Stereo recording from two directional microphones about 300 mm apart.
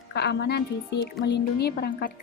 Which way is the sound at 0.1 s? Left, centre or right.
Left.